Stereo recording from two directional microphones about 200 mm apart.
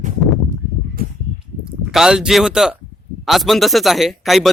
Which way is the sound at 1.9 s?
5° right (ahead or behind).